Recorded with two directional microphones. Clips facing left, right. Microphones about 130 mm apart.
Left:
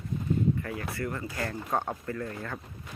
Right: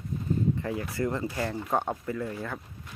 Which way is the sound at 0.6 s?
20° right (ahead or behind).